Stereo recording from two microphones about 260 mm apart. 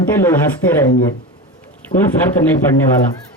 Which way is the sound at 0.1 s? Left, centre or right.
Centre.